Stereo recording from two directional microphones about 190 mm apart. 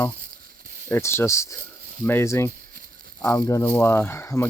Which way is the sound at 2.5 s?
50° right (ahead or behind).